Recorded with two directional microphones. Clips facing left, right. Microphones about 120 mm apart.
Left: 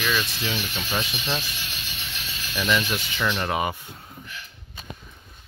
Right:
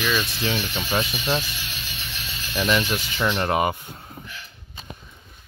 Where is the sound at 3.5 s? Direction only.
45° right (ahead or behind).